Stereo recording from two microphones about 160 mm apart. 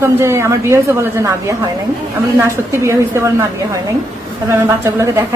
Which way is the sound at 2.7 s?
15° right (ahead or behind).